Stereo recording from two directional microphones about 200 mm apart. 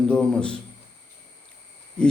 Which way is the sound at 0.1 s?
5° left (ahead or behind).